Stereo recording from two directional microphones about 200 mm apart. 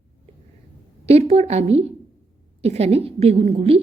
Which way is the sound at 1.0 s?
30° right (ahead or behind).